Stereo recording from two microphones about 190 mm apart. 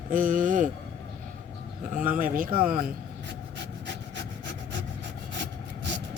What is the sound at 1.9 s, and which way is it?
Speech, 45° right (ahead or behind).